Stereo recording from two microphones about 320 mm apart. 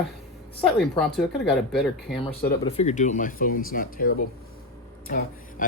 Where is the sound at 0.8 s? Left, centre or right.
Centre.